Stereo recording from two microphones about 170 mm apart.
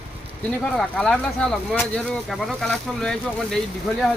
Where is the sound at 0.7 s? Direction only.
5° left (ahead or behind).